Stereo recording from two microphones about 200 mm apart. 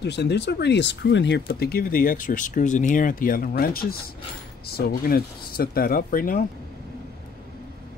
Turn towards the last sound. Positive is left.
turn(degrees=45)  # may be behind; listen again after turning